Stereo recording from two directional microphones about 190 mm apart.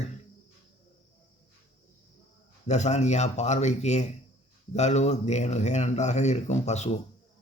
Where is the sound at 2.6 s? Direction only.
35° left (ahead or behind).